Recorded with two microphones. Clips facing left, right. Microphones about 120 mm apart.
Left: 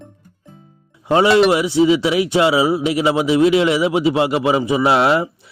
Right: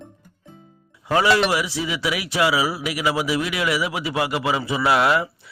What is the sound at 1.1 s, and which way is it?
A man's voice, 25° left (ahead or behind).